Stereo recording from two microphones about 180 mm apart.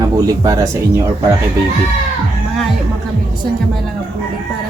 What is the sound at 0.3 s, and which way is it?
Speech, 20° right (ahead or behind).